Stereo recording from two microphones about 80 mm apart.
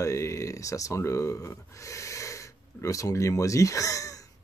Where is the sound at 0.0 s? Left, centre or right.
Left.